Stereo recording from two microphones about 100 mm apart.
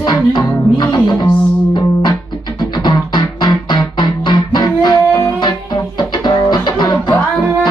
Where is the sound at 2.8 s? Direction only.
50° left (ahead or behind).